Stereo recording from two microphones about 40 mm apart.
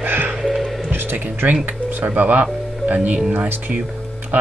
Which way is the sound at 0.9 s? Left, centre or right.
Right.